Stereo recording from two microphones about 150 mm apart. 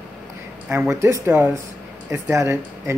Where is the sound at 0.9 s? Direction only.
20° right (ahead or behind).